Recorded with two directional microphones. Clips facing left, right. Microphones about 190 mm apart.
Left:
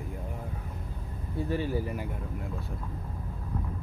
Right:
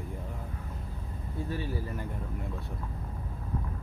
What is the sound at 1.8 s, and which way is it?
Speech, 10° left (ahead or behind).